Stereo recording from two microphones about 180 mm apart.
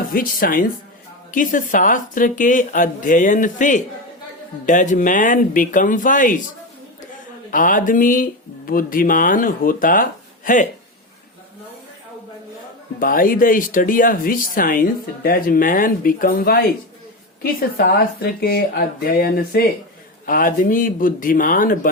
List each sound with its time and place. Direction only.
0.1 s speech: 50° left (ahead or behind)
7.5 s speech: 45° left (ahead or behind)
13.0 s speech: 50° left (ahead or behind)